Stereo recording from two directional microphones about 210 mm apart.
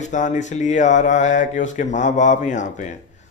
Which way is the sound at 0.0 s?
35° left (ahead or behind).